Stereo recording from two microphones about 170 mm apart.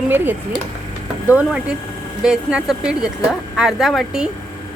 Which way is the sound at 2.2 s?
5° right (ahead or behind).